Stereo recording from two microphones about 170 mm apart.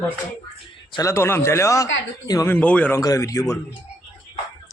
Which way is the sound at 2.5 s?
10° left (ahead or behind).